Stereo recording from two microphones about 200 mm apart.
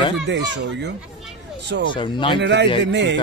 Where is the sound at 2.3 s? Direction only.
60° right (ahead or behind).